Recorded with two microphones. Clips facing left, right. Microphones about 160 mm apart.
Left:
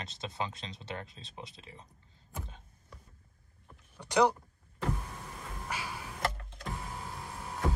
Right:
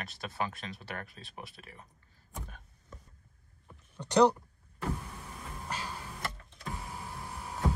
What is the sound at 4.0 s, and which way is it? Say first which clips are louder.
Speech: right 3 dB; 10° left (ahead or behind).